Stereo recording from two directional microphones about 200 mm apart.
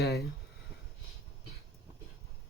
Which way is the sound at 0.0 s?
55° left (ahead or behind).